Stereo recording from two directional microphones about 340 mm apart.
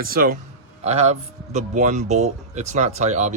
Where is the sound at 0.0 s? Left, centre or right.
Right.